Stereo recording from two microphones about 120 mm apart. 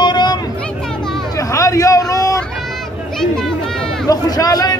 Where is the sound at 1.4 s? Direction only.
30° left (ahead or behind).